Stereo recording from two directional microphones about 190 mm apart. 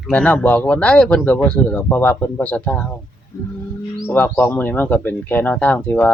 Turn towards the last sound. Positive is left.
turn(degrees=10)  # may be behind; listen again after turning